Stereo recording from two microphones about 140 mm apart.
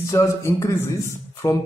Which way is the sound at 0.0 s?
20° left (ahead or behind).